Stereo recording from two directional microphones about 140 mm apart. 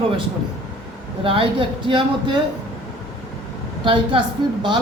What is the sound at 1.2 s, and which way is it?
A man's voice, 40° right (ahead or behind).